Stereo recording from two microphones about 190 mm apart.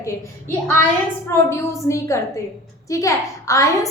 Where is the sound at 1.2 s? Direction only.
15° left (ahead or behind).